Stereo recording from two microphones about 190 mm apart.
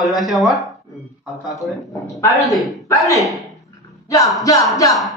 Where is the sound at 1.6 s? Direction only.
15° left (ahead or behind).